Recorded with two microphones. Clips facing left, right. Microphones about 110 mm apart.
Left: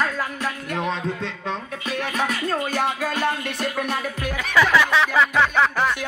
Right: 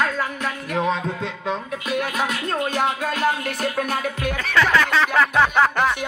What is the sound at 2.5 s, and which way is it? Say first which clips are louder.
Speech: right 1 dB; centre (ahead or behind).